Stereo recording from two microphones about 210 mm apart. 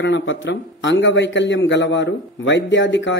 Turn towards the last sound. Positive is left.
turn(degrees=60)  # may be behind; listen again after turning